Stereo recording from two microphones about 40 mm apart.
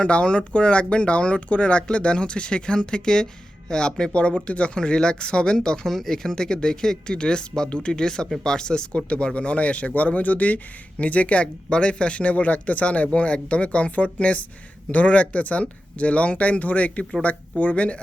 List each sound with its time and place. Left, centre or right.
0.0 s speech: left